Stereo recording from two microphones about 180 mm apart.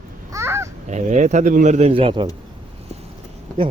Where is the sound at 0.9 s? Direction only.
40° right (ahead or behind).